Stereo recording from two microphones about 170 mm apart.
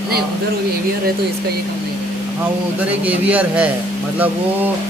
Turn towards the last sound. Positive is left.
turn(degrees=-5)  # may be behind; listen again after turning